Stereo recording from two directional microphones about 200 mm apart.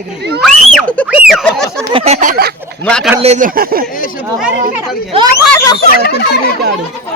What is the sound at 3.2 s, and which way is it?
Speech, 40° right (ahead or behind).